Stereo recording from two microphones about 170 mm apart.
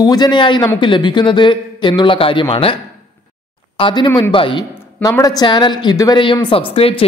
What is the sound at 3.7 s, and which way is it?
Speech, 25° left (ahead or behind).